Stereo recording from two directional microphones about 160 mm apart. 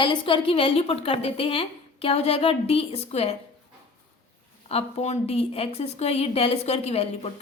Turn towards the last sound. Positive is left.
turn(degrees=40)  # may be behind; listen again after turning